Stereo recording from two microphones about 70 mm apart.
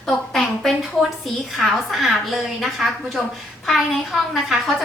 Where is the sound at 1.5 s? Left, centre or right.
Centre.